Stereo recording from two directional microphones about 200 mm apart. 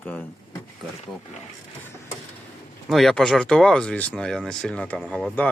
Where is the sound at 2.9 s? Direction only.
Centre (ahead or behind).